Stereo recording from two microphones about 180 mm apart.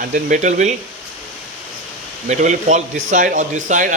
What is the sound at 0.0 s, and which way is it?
Speech, 45° right (ahead or behind).